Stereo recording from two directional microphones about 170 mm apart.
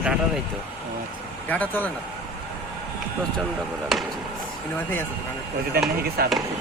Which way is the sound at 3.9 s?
Centre (ahead or behind).